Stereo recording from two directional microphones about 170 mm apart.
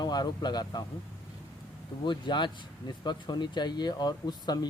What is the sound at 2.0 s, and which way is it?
Speech, 25° left (ahead or behind).